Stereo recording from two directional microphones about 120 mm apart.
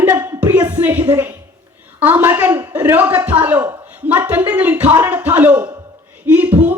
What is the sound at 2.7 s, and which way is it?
A woman's voice, 15° right (ahead or behind).